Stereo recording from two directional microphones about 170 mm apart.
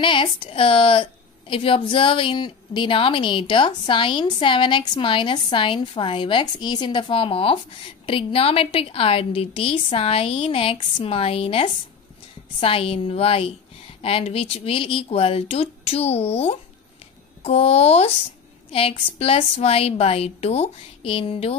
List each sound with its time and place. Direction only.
0.0 s a woman's voice: 30° left (ahead or behind)